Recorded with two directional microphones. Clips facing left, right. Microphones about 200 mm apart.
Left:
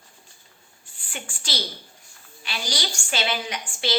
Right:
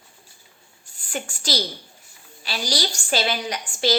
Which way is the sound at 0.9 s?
40° right (ahead or behind).